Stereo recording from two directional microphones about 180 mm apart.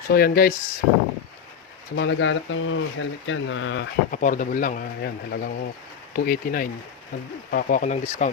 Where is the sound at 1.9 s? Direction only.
85° left.